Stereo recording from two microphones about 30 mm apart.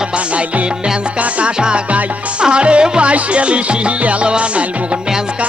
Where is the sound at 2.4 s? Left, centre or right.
Right.